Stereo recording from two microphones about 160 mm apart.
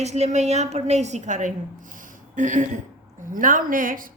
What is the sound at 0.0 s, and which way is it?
A woman's voice, 45° right (ahead or behind).